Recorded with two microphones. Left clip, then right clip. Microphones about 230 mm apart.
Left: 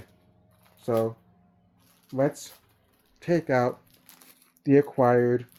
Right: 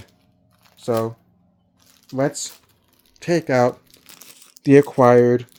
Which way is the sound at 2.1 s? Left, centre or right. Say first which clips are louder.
Right 4 dB; right.